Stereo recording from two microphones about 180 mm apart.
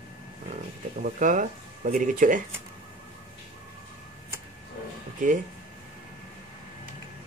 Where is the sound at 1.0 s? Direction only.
45° right (ahead or behind).